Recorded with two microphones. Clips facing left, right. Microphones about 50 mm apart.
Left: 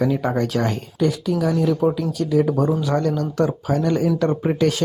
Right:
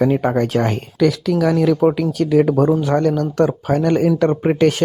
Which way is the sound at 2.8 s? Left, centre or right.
Right.